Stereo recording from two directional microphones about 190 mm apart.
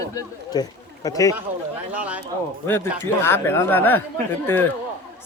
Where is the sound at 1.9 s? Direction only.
5° right (ahead or behind).